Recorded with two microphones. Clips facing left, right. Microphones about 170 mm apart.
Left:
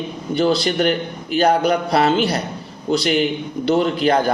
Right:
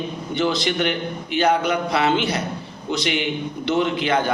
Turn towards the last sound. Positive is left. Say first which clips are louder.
# left 4 dB
turn(degrees=35)  # may be behind; listen again after turning